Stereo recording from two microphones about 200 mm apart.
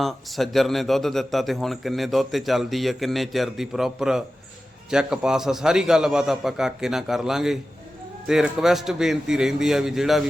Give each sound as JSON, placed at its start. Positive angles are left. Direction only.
{"t": 0.0, "sound": "a man's voice", "side_deg": 0}